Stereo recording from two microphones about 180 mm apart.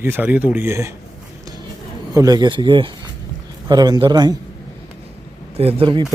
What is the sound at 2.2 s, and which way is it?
Speech, 20° right (ahead or behind).